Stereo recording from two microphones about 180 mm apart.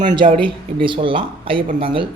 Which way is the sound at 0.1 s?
25° right (ahead or behind).